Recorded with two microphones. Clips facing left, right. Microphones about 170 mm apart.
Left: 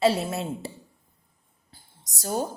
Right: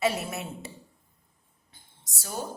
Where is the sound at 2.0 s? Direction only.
40° left (ahead or behind).